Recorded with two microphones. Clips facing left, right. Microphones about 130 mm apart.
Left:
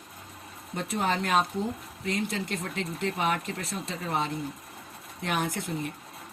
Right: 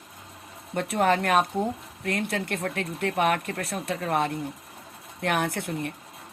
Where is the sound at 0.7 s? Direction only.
60° right (ahead or behind).